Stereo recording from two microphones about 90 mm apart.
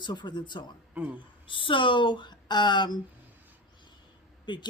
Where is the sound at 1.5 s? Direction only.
70° left (ahead or behind).